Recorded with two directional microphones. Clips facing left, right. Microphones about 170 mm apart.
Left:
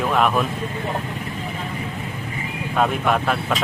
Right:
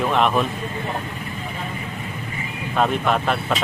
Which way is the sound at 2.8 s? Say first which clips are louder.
Even; 5° left (ahead or behind).